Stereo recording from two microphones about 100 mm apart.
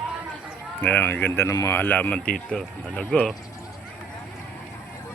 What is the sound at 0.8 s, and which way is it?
Speech, 20° left (ahead or behind).